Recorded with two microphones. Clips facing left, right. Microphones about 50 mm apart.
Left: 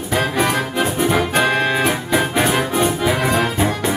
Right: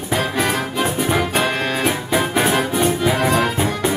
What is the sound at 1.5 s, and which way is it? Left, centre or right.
Music, centre.